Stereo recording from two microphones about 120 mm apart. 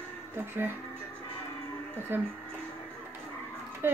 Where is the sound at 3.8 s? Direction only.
20° right (ahead or behind).